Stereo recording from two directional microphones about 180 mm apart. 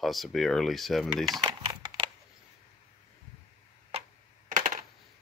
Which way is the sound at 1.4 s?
25° right (ahead or behind).